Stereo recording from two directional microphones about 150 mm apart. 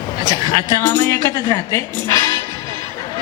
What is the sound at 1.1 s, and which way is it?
Speech, 20° left (ahead or behind).